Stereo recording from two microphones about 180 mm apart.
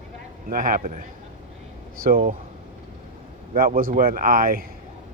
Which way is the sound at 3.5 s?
55° right (ahead or behind).